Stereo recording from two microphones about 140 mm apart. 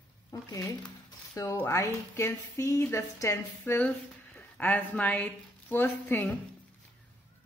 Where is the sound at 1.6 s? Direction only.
20° left (ahead or behind).